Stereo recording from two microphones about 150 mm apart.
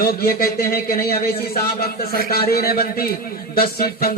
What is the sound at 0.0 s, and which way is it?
A man's voice, 85° left.